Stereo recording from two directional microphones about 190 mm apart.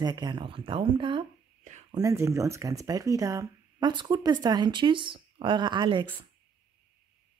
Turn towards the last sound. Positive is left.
turn(degrees=-25)  # may be behind; listen again after turning